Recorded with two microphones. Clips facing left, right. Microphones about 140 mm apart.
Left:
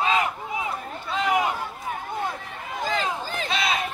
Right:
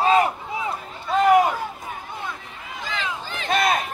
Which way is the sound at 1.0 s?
50° right (ahead or behind).